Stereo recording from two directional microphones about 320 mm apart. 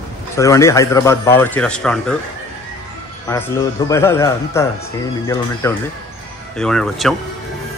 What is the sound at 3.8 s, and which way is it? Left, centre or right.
A man's voice, centre.